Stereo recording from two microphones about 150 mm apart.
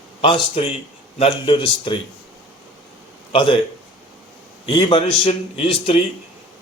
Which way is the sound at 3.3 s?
35° left (ahead or behind).